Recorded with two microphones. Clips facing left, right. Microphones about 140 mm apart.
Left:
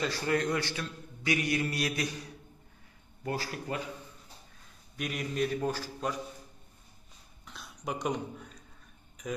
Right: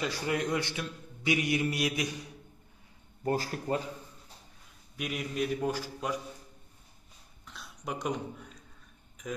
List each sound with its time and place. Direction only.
0.0 s a man's voice: 15° right (ahead or behind)
3.3 s speech: 35° right (ahead or behind)
4.9 s a man's voice: 5° right (ahead or behind)
7.4 s speech: centre (ahead or behind)